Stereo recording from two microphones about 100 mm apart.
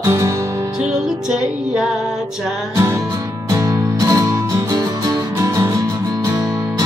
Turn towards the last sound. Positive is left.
turn(degrees=-30)  # may be behind; listen again after turning